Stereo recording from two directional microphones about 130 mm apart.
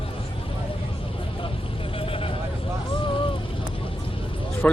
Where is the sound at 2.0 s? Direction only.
45° left (ahead or behind).